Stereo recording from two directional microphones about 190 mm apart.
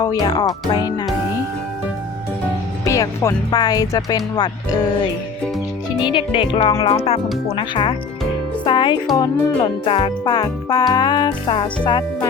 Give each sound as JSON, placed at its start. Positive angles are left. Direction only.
{"t": 0.0, "sound": "speech", "side_deg": 20}
{"t": 2.8, "sound": "speech", "side_deg": 15}
{"t": 6.0, "sound": "speech", "side_deg": 25}
{"t": 8.6, "sound": "music", "side_deg": 25}
{"t": 9.1, "sound": "speech", "side_deg": 25}